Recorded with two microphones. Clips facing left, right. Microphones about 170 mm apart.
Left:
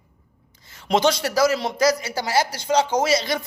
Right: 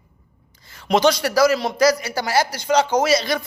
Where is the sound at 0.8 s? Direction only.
25° left (ahead or behind).